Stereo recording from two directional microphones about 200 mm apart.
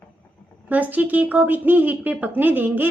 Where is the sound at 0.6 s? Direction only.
10° right (ahead or behind).